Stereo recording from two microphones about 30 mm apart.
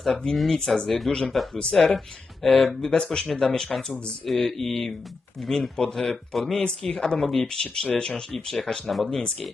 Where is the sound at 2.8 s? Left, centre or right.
Left.